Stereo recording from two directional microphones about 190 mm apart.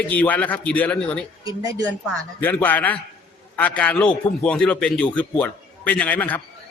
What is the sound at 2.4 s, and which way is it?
A man's voice, 10° left (ahead or behind).